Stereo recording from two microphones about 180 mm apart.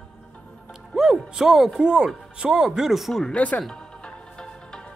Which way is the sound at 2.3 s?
5° right (ahead or behind).